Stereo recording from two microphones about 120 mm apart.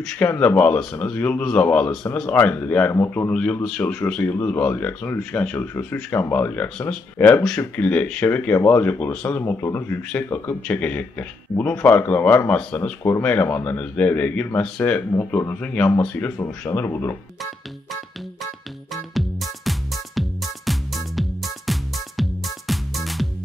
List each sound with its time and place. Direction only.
0.2 s speech: 15° left (ahead or behind)
19.1 s music: centre (ahead or behind)